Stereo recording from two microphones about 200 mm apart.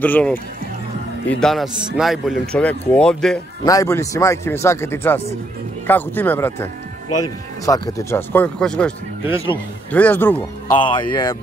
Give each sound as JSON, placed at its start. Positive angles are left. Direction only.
{"t": 0.0, "sound": "speech", "side_deg": 10}
{"t": 1.4, "sound": "speech", "side_deg": 0}
{"t": 3.6, "sound": "speech", "side_deg": 15}
{"t": 9.2, "sound": "speech", "side_deg": -10}
{"t": 9.8, "sound": "speech", "side_deg": 10}
{"t": 10.7, "sound": "speech", "side_deg": 25}